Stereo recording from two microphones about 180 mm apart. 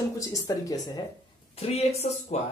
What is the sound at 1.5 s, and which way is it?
Speech, 35° left (ahead or behind).